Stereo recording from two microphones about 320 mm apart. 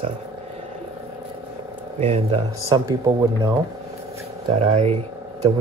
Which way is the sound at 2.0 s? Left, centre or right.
Centre.